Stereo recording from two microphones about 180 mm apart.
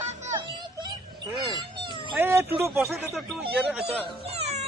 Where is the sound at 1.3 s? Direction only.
25° right (ahead or behind).